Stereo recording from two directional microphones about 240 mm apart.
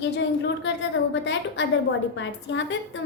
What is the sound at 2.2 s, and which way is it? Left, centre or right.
Speech, left.